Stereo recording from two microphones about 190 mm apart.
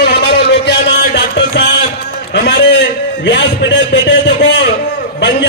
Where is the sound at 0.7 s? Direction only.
65° left (ahead or behind).